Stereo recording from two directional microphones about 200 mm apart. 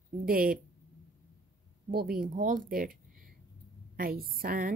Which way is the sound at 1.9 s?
45° right (ahead or behind).